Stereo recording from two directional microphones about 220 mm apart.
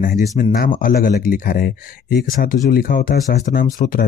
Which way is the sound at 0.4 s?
40° left (ahead or behind).